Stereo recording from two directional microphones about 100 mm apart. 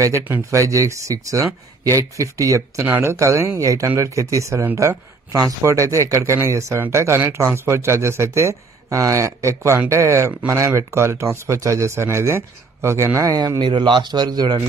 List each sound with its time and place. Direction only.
0.0 s speech: 30° right (ahead or behind)
13.6 s a man's voice: 50° right (ahead or behind)